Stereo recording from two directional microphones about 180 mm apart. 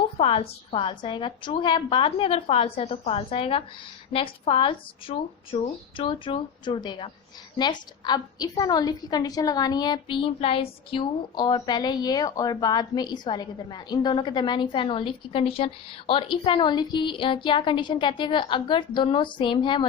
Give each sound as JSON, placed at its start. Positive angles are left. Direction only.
{"t": 0.2, "sound": "a woman's voice", "side_deg": 35}